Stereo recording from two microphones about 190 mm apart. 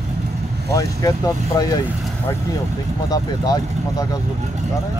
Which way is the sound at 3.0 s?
20° left (ahead or behind).